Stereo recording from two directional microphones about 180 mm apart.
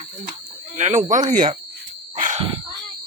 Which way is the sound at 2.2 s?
45° right (ahead or behind).